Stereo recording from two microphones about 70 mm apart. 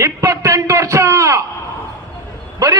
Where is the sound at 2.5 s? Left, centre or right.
Right.